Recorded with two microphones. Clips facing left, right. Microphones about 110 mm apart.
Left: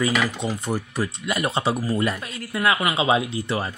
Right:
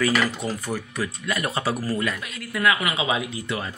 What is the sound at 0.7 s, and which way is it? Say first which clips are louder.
Speech: left 3 dB; 30° left (ahead or behind).